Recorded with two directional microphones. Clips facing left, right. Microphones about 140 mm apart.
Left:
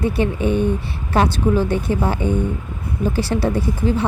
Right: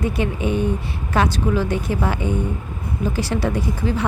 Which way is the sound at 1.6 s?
25° left (ahead or behind).